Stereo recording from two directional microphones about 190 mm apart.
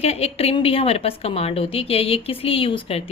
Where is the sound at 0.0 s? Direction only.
35° left (ahead or behind).